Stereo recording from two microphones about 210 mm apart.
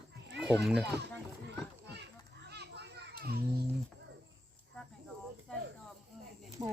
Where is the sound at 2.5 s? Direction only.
50° right (ahead or behind).